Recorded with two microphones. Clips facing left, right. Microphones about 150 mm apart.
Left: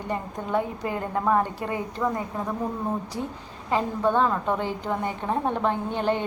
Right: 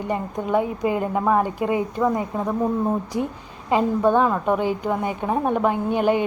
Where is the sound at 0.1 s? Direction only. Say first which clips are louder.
Right 4 dB; 15° right (ahead or behind).